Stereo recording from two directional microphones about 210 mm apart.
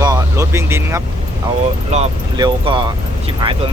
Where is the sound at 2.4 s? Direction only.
25° right (ahead or behind).